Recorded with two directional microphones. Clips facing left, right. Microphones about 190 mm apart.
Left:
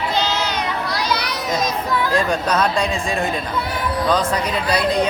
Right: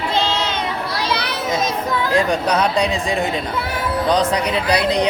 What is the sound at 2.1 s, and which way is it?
Speech, 15° right (ahead or behind).